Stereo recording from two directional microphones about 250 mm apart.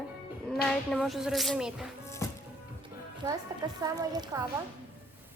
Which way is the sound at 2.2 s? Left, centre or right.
Centre.